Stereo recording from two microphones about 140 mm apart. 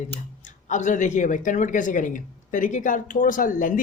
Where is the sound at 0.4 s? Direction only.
60° left (ahead or behind).